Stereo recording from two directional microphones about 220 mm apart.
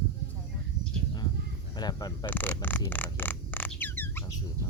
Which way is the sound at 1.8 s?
20° left (ahead or behind).